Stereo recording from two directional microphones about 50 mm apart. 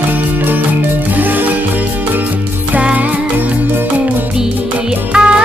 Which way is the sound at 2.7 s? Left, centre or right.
Right.